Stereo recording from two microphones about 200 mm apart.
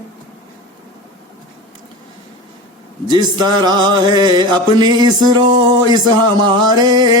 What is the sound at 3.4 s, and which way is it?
Music, 20° right (ahead or behind).